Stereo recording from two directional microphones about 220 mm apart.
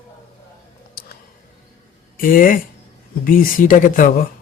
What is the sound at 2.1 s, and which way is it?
Speech, 40° left (ahead or behind).